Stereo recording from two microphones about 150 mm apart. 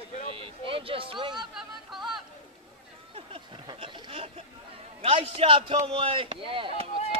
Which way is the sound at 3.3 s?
35° right (ahead or behind).